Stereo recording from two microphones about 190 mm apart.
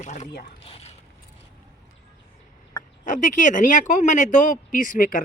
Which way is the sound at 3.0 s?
40° left (ahead or behind).